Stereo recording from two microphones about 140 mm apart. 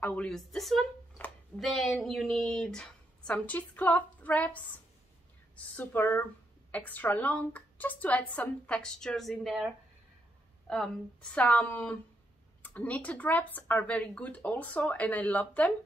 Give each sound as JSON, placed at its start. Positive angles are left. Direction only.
{"t": 0.0, "sound": "speech", "side_deg": 5}
{"t": 5.8, "sound": "speech", "side_deg": 15}
{"t": 10.7, "sound": "a woman's voice", "side_deg": 5}